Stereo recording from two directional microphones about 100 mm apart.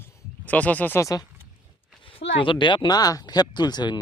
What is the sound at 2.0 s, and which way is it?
Speech, 60° left (ahead or behind).